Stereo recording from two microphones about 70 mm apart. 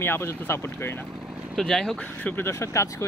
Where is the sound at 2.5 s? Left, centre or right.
Left.